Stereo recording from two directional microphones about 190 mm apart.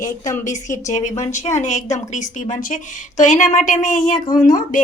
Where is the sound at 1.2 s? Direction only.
40° left (ahead or behind).